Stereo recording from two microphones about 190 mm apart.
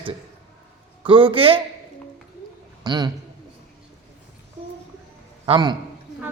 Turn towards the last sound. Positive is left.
turn(degrees=-25)  # may be behind; listen again after turning